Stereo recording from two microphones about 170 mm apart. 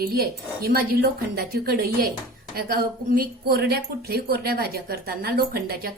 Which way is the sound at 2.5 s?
60° right (ahead or behind).